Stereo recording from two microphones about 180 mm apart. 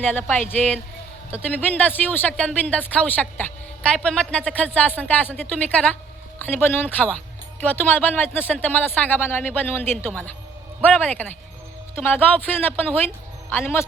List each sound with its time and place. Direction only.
0.1 s speech: 10° left (ahead or behind)